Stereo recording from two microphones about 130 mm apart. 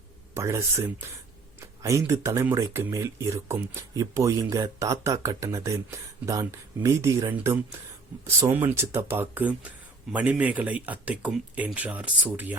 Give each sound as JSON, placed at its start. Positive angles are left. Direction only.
{"t": 0.3, "sound": "speech", "side_deg": -20}
{"t": 1.8, "sound": "speech", "side_deg": -25}